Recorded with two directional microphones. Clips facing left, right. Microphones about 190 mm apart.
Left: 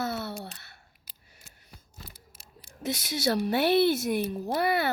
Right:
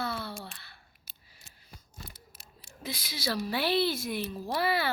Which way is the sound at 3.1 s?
50° left (ahead or behind).